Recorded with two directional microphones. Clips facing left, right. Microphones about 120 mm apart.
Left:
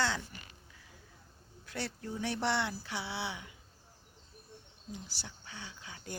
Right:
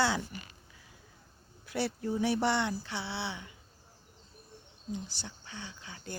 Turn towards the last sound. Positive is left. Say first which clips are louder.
# right 3 dB
turn(degrees=5)  # may be behind; listen again after turning